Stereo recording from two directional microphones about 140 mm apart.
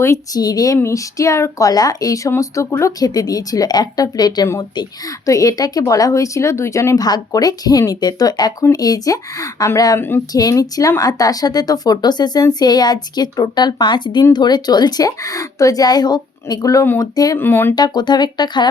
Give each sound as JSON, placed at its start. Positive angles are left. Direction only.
{"t": 0.0, "sound": "speech", "side_deg": 25}
{"t": 17.7, "sound": "speech", "side_deg": 30}